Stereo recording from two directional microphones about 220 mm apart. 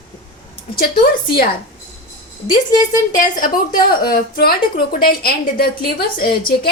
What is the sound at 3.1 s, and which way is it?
A woman's voice, 35° left (ahead or behind).